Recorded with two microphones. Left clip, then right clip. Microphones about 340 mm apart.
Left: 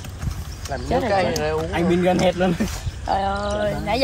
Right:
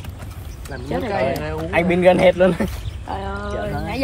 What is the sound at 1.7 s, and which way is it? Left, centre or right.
Speech, centre.